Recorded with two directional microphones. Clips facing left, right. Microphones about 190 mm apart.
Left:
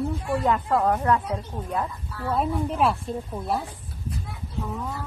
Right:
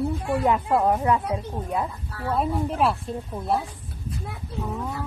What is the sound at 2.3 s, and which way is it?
A woman's voice, centre (ahead or behind).